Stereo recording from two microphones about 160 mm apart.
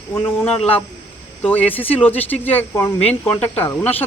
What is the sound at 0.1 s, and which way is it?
Speech, 15° left (ahead or behind).